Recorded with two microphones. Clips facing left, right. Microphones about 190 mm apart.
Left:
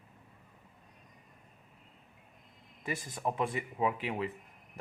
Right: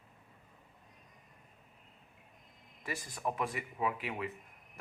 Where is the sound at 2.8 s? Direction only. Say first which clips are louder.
Left 3 dB; 25° left (ahead or behind).